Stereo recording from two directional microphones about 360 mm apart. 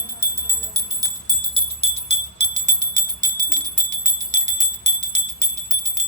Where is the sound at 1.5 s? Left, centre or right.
Centre.